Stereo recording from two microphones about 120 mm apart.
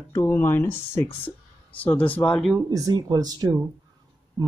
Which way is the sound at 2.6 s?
30° right (ahead or behind).